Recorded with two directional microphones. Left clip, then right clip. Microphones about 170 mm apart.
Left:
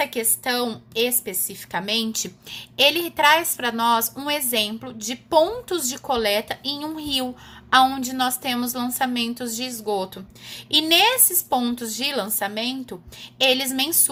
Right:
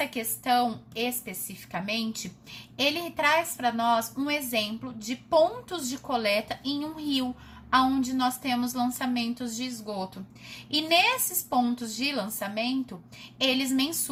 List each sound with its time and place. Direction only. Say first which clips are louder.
0.0 s a woman's voice: left 7 dB; 35° left (ahead or behind)